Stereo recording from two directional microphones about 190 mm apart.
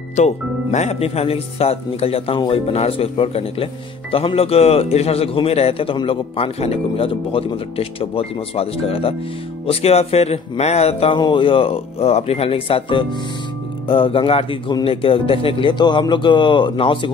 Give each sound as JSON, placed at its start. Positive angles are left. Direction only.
{"t": 0.1, "sound": "a man's voice", "side_deg": 40}